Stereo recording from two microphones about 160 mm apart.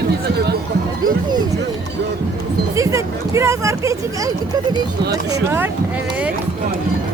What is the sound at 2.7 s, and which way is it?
Speech, 20° right (ahead or behind).